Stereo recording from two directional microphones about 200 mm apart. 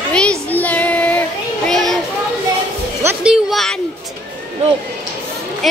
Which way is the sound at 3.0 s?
5° right (ahead or behind).